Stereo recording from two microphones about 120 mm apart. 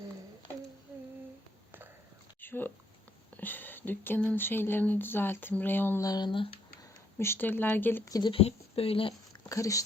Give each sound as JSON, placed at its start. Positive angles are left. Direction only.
{"t": 2.4, "sound": "a sound", "side_deg": 15}
{"t": 3.3, "sound": "speech", "side_deg": 15}
{"t": 6.0, "sound": "speech", "side_deg": 35}
{"t": 7.2, "sound": "speech", "side_deg": 20}
{"t": 8.3, "sound": "a woman's voice", "side_deg": 55}
{"t": 9.3, "sound": "a sound", "side_deg": 25}